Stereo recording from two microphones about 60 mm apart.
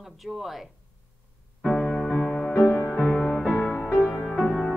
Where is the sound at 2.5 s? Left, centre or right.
Left.